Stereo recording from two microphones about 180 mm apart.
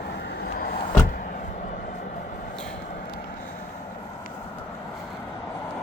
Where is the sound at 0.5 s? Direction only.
55° left (ahead or behind).